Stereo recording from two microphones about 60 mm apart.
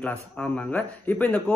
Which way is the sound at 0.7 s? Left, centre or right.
Left.